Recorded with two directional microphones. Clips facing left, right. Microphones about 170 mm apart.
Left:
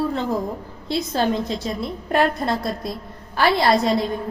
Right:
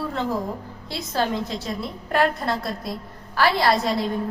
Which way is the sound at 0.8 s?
20° left (ahead or behind).